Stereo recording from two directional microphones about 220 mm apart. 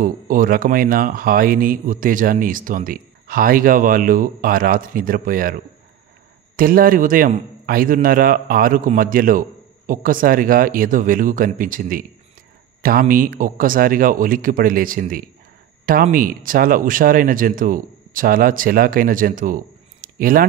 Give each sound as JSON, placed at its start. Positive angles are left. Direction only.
{"t": 0.0, "sound": "speech", "side_deg": -40}